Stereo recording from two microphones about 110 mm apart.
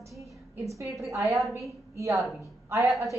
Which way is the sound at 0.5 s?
30° right (ahead or behind).